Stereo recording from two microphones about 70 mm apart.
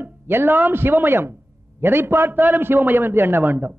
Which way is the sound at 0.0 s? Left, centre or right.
Right.